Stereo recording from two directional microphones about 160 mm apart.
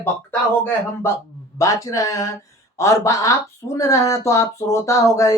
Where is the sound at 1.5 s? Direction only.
20° left (ahead or behind).